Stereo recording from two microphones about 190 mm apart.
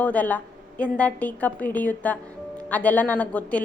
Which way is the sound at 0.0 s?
10° left (ahead or behind).